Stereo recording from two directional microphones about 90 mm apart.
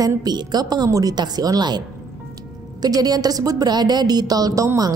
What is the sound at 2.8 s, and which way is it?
Speech, 45° right (ahead or behind).